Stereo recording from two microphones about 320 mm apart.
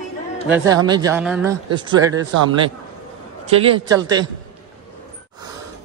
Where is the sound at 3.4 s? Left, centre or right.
Centre.